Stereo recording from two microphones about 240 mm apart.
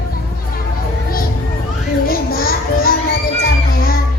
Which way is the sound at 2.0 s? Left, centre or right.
Left.